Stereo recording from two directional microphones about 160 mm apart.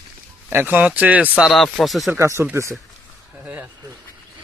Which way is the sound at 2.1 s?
15° right (ahead or behind).